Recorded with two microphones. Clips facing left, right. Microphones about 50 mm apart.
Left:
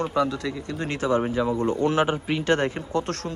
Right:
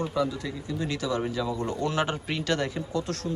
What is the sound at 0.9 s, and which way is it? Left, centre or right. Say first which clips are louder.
Speech: left 7 dB; left.